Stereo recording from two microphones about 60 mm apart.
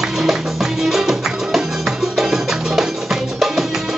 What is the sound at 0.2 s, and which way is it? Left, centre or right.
Music, centre.